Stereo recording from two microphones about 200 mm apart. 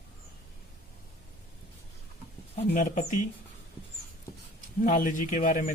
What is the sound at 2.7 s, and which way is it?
Speech, 40° left (ahead or behind).